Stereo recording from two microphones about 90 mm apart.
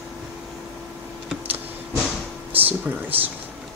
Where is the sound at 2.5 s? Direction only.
20° right (ahead or behind).